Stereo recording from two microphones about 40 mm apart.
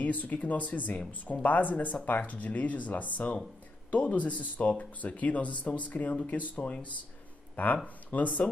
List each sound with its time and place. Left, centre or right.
0.0 s speech: left